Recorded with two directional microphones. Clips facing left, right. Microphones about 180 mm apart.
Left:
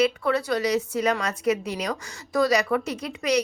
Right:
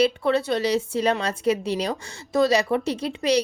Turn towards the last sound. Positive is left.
turn(degrees=-30)  # may be behind; listen again after turning